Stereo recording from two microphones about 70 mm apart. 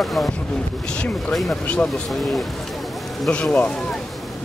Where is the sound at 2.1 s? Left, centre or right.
Centre.